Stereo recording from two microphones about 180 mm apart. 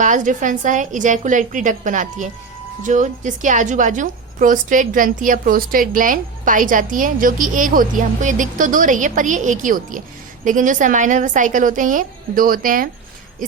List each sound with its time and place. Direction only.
0.0 s a woman's voice: 45° right (ahead or behind)